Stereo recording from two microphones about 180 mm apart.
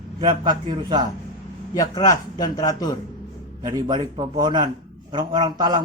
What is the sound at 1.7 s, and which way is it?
A man's voice, 20° left (ahead or behind).